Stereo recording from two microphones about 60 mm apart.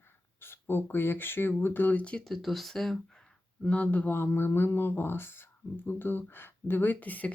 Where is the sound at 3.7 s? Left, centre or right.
Left.